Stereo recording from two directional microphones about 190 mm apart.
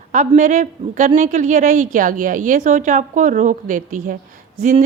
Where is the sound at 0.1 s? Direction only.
40° right (ahead or behind).